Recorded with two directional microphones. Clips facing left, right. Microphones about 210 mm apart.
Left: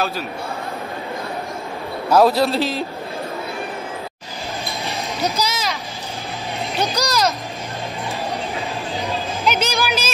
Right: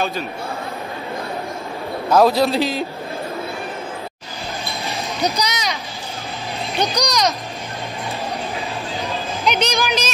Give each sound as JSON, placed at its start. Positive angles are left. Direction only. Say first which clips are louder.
{"t": 2.0, "sound": "a man's voice", "louder": "even", "side_deg": 5}
{"t": 5.4, "sound": "speech", "louder": "even", "side_deg": 0}
{"t": 6.8, "sound": "a man's voice", "louder": "right 1 dB", "side_deg": 5}
{"t": 9.0, "sound": "music", "louder": "even", "side_deg": 0}